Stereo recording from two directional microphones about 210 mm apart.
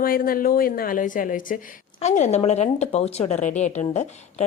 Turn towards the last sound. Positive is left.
turn(degrees=35)  # may be behind; listen again after turning